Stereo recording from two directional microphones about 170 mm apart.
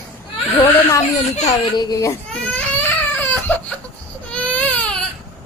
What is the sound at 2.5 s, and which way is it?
Baby cry, 10° left (ahead or behind).